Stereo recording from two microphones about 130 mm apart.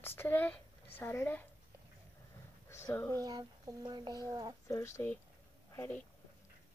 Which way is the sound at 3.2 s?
30° right (ahead or behind).